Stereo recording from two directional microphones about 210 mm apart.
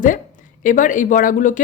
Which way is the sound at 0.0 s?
40° left (ahead or behind).